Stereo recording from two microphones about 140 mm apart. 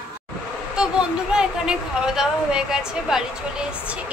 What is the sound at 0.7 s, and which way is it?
A woman's voice, 5° right (ahead or behind).